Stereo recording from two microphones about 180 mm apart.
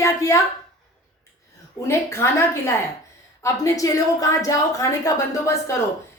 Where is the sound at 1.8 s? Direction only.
15° left (ahead or behind).